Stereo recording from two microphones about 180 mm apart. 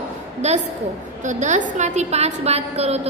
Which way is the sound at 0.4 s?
40° right (ahead or behind).